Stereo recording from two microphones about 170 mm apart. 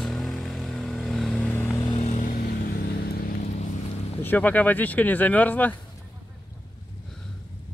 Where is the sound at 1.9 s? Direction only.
45° left (ahead or behind).